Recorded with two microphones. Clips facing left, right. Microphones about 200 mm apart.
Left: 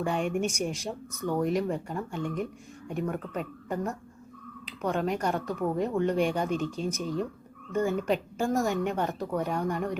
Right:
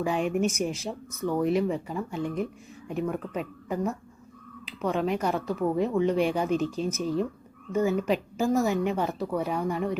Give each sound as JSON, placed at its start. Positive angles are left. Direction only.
{"t": 0.0, "sound": "a woman's voice", "side_deg": -5}
{"t": 7.0, "sound": "speech", "side_deg": -35}
{"t": 7.7, "sound": "a woman's voice", "side_deg": -5}